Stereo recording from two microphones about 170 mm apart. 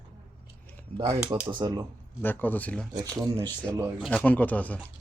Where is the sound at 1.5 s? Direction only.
25° right (ahead or behind).